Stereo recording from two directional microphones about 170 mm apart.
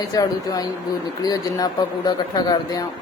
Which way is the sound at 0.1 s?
20° left (ahead or behind).